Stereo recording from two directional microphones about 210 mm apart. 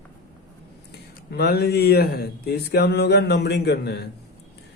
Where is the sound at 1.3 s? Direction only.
50° left (ahead or behind).